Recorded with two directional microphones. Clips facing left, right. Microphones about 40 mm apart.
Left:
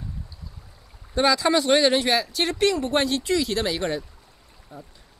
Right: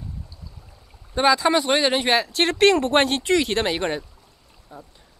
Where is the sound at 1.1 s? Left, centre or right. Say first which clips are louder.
Right 2 dB; centre.